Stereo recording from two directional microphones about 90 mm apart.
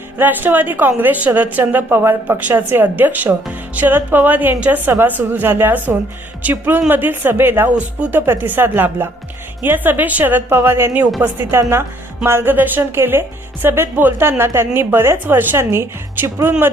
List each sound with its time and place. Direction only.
0.2 s speech: 20° right (ahead or behind)
7.8 s speech: 15° right (ahead or behind)